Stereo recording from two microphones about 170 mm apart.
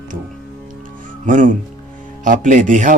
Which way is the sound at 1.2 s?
50° right (ahead or behind).